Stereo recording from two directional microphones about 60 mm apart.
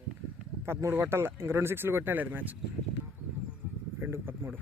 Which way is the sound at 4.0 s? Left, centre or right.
Right.